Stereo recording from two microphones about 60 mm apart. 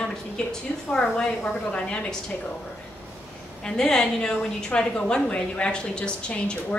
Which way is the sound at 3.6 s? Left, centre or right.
Centre.